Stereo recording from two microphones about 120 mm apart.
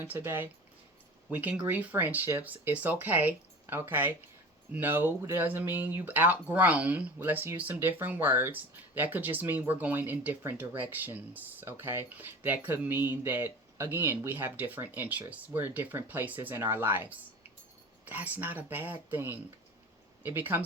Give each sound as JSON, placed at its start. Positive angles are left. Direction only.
{"t": 0.0, "sound": "speech", "side_deg": -15}